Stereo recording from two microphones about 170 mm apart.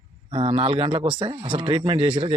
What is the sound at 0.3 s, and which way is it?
Speech, 30° right (ahead or behind).